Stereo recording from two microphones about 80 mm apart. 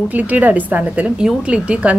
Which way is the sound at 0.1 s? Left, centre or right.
Centre.